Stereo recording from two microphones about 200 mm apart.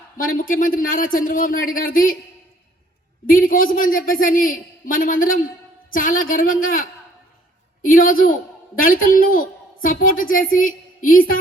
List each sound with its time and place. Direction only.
0.2 s a man's voice: 45° left (ahead or behind)
3.2 s a man's voice: 45° left (ahead or behind)
7.9 s a man's voice: 45° left (ahead or behind)